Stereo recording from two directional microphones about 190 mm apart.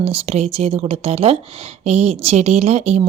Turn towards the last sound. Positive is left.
turn(degrees=-35)  # may be behind; listen again after turning